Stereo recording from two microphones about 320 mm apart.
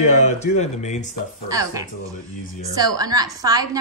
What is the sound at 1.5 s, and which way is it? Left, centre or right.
A woman's voice, centre.